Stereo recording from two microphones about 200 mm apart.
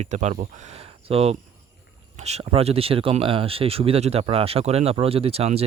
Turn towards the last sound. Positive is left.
turn(degrees=-30)  # may be behind; listen again after turning